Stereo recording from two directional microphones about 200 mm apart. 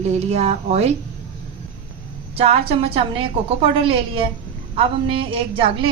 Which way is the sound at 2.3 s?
30° right (ahead or behind).